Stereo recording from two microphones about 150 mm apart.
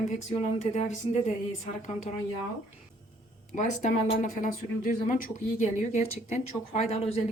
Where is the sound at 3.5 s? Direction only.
55° left (ahead or behind).